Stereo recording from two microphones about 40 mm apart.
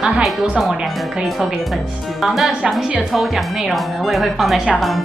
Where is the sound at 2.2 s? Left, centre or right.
Centre.